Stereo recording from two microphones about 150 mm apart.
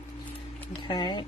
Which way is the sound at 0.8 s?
35° left (ahead or behind).